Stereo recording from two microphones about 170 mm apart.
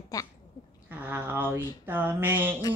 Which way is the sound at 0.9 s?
10° right (ahead or behind).